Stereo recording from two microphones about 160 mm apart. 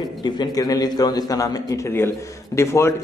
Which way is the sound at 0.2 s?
25° left (ahead or behind).